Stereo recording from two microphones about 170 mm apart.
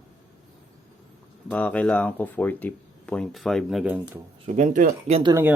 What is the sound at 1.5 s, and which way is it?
Speech, 10° left (ahead or behind).